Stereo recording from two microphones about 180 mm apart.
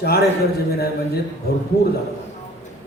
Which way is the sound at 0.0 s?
60° left (ahead or behind).